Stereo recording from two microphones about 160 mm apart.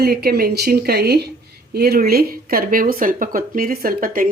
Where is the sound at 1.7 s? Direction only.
80° right; by 4.3 s 60° right (ahead or behind).